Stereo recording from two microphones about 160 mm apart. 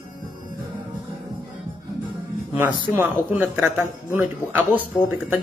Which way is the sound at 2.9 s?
10° right (ahead or behind).